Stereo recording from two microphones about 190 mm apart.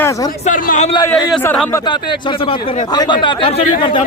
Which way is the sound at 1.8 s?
25° left (ahead or behind).